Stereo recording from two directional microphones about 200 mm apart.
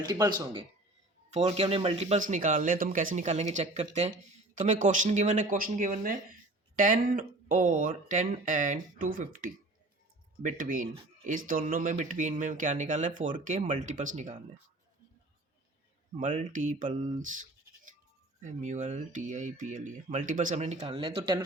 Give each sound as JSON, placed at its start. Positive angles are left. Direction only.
{"t": 0.0, "sound": "speech", "side_deg": -20}
{"t": 1.3, "sound": "speech", "side_deg": -30}
{"t": 16.1, "sound": "speech", "side_deg": -35}